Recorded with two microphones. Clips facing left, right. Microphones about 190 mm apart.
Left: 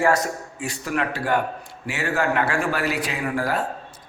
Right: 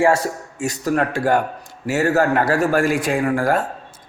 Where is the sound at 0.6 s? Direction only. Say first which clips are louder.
Right 7 dB; 40° right (ahead or behind).